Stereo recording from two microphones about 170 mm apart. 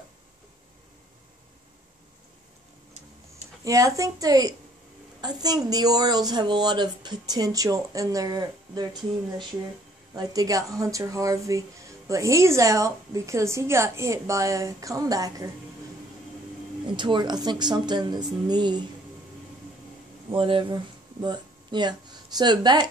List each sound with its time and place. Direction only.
3.6 s speech: 20° right (ahead or behind)
10.1 s a woman's voice: 20° right (ahead or behind)
16.8 s speech: 25° right (ahead or behind)
20.2 s speech: 30° right (ahead or behind)